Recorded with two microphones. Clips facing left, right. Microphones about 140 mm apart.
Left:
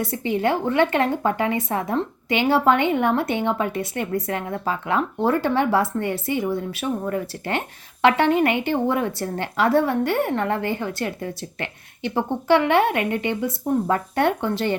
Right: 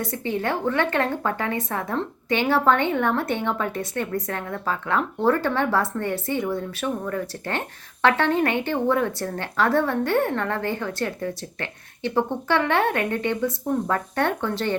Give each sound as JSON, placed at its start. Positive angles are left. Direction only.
{"t": 0.0, "sound": "a woman's voice", "side_deg": 10}